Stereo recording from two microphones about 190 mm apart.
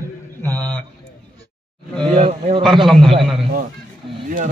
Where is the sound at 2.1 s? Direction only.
35° right (ahead or behind).